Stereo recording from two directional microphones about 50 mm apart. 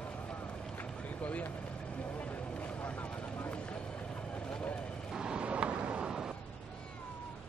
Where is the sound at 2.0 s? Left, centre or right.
Left.